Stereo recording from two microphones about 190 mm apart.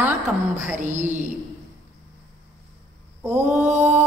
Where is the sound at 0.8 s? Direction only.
40° right (ahead or behind).